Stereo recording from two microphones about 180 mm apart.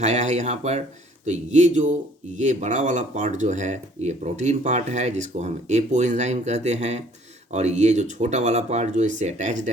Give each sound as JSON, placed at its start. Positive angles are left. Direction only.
{"t": 0.0, "sound": "speech", "side_deg": -40}